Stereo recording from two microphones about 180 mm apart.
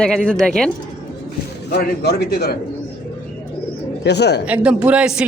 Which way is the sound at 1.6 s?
65° left (ahead or behind).